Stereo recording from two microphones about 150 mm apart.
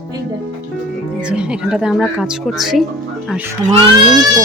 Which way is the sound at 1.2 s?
5° right (ahead or behind).